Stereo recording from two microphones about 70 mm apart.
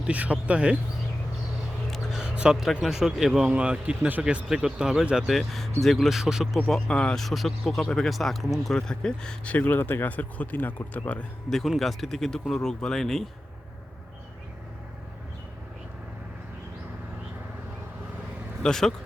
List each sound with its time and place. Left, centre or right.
0.1 s speech: centre
1.9 s a sound: centre
2.8 s speech: centre
3.5 s speech: centre
5.3 s speech: centre
6.7 s speech: centre
11.8 s speech: centre
18.6 s speech: centre